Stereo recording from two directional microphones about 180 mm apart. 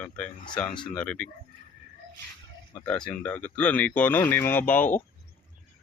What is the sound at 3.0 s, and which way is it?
Speech, 10° left (ahead or behind).